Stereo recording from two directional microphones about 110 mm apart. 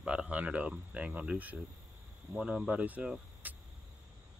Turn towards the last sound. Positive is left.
turn(degrees=-15)  # may be behind; listen again after turning